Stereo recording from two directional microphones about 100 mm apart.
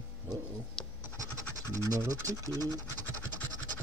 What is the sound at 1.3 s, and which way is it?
Scratch, 35° right (ahead or behind).